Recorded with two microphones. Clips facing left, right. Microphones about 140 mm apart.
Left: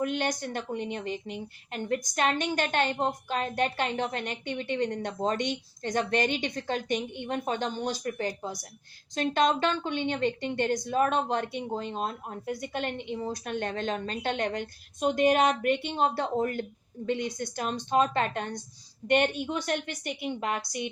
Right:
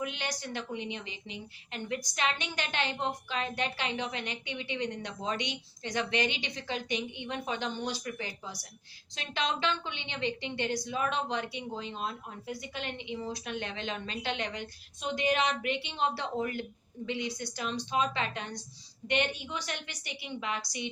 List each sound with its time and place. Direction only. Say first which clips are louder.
0.0 s a woman's voice: left 7 dB; 50° left (ahead or behind)